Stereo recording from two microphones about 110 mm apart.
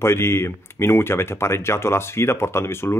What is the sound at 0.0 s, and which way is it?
Speech, 25° left (ahead or behind).